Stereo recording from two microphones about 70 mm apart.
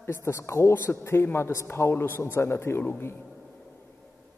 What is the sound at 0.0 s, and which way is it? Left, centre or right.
A man's voice, left.